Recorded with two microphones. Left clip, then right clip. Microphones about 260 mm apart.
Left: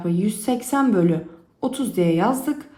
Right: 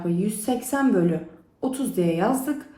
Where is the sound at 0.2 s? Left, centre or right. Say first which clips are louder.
Left 2 dB; left.